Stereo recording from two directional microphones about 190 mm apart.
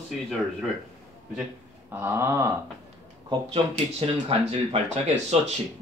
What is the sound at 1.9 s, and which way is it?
Speech, 10° right (ahead or behind).